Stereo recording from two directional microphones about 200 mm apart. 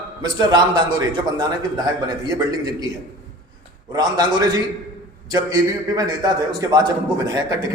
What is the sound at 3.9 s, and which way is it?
A man's voice, 20° right (ahead or behind).